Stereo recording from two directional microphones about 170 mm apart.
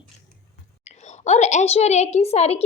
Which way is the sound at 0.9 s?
40° left (ahead or behind).